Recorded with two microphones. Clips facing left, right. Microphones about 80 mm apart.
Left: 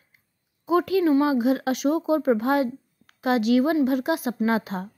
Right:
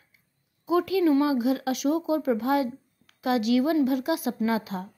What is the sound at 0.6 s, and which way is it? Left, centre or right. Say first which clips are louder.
A woman's voice: left 2 dB; left.